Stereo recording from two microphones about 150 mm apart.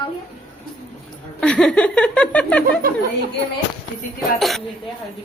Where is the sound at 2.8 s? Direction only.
75° right (ahead or behind).